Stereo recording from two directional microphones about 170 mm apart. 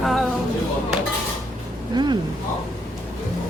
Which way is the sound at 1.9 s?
25° right (ahead or behind).